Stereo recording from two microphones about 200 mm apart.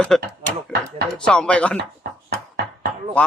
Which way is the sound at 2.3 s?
50° right (ahead or behind).